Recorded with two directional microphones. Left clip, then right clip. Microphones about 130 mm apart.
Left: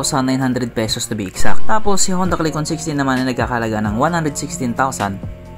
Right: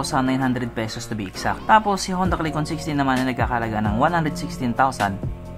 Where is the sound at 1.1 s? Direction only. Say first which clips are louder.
Left 3 dB; 35° left (ahead or behind).